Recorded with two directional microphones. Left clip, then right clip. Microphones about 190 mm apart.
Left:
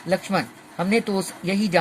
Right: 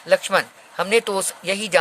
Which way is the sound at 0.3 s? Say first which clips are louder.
Right 5 dB; 50° right (ahead or behind).